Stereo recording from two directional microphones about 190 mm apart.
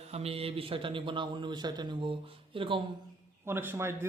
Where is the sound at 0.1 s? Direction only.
30° right (ahead or behind).